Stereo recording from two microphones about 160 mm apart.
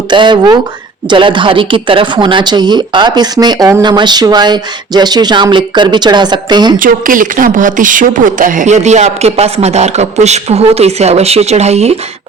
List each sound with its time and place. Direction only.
0.1 s speech: 30° right (ahead or behind)
6.7 s speech: 60° right (ahead or behind); by 11.9 s 40° right (ahead or behind)